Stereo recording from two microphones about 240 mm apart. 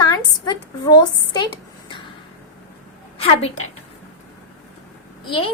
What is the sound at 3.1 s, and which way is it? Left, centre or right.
Speech, left.